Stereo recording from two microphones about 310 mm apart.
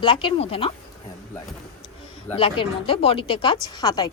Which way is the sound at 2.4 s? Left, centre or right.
Centre.